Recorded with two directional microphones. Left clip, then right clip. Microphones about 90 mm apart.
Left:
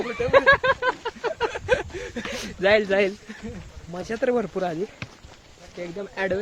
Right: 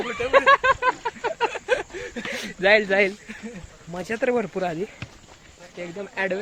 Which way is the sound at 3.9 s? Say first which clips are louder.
Even; 5° right (ahead or behind).